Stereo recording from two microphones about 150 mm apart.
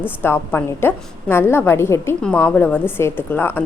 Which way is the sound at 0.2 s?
15° left (ahead or behind).